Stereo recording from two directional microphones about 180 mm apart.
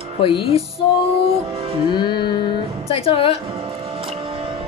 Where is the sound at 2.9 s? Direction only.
30° left (ahead or behind).